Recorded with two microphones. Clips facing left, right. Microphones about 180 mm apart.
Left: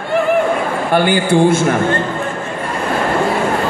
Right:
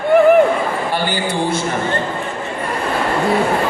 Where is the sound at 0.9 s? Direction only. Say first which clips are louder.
Left 6 dB; 55° left (ahead or behind).